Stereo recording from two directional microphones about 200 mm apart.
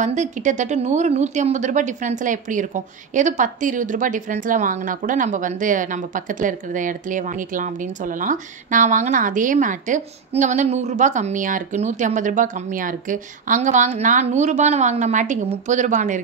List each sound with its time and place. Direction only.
0.0 s a woman's voice: 35° right (ahead or behind)